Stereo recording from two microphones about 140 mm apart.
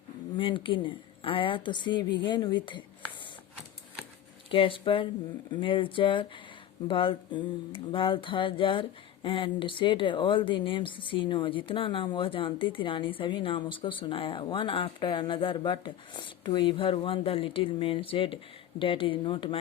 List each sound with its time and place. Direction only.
0.3 s speech: 35° left (ahead or behind)
4.5 s speech: 40° left (ahead or behind)